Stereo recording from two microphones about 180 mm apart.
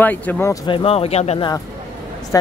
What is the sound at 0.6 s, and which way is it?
Speech, 30° left (ahead or behind).